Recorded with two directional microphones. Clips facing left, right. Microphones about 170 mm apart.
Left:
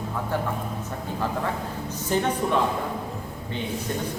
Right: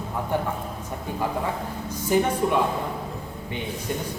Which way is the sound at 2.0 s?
10° right (ahead or behind).